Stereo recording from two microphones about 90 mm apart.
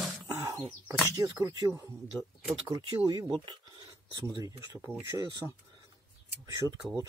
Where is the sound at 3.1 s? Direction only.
55° right (ahead or behind).